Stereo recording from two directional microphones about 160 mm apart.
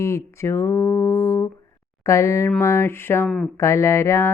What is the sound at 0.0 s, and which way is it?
Speech, 15° left (ahead or behind).